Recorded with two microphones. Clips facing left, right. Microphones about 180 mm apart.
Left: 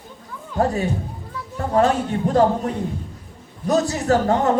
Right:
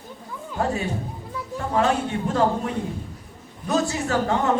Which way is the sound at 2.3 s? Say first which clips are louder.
Left 5 dB; 40° left (ahead or behind).